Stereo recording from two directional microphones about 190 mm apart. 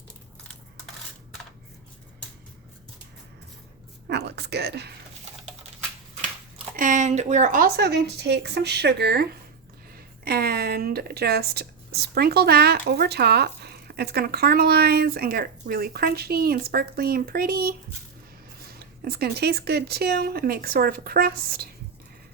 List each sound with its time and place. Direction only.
4.1 s speech: 60° right (ahead or behind)
6.7 s speech: 40° right (ahead or behind)
7.8 s speech: 60° right (ahead or behind)
10.2 s speech: 55° right (ahead or behind)